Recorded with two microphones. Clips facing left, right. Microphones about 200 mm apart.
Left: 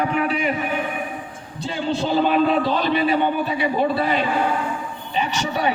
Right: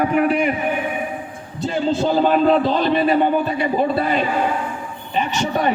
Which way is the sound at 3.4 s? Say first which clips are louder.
Right 2 dB; 50° right (ahead or behind).